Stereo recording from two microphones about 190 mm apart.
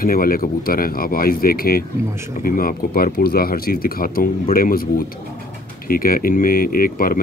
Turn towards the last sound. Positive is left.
turn(degrees=50)  # may be behind; listen again after turning